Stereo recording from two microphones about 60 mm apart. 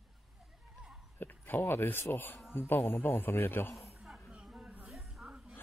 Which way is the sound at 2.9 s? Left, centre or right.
Left.